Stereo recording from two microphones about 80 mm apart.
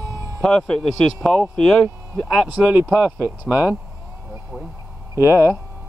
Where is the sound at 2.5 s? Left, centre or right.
Centre.